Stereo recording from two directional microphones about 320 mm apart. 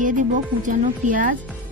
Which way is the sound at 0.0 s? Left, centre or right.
Right.